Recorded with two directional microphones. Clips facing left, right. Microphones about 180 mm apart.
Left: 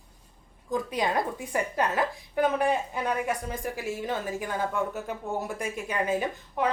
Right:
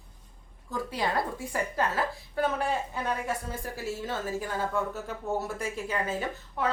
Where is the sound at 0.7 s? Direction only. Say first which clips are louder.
Left 3 dB; 20° left (ahead or behind).